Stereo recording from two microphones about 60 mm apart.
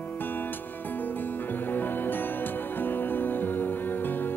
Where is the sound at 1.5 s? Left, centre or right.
Left.